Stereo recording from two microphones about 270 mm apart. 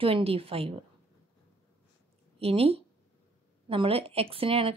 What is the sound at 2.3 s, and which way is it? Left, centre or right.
A woman's voice, right.